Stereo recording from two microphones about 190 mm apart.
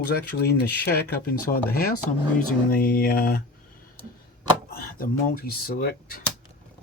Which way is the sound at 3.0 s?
50° left (ahead or behind).